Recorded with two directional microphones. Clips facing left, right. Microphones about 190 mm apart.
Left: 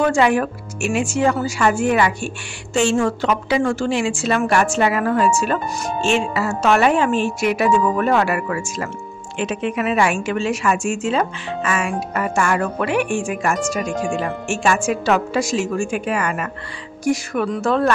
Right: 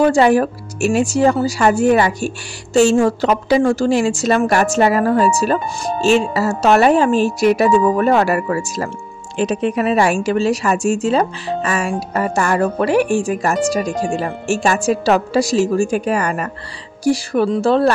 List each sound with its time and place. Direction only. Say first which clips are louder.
0.0 s a woman's voice: right 4 dB; 35° right (ahead or behind)